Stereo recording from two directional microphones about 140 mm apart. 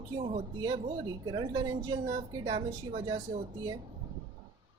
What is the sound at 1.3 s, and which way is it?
Speech, 30° right (ahead or behind).